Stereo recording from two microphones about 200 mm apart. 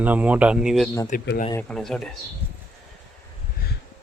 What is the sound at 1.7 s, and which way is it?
Speech, 5° left (ahead or behind).